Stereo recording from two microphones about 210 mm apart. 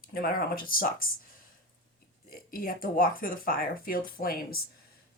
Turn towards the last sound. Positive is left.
turn(degrees=45)  # may be behind; listen again after turning